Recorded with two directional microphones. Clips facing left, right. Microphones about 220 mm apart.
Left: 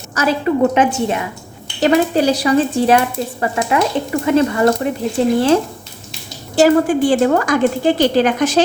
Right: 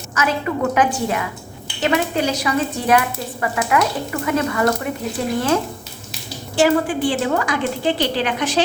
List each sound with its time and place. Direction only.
0.1 s speech: 35° left (ahead or behind)
1.8 s speech: 35° left (ahead or behind)
6.6 s a woman's voice: 45° left (ahead or behind)